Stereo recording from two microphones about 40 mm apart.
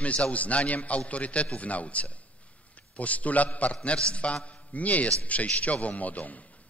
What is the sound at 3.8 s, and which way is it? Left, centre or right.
Speech, left.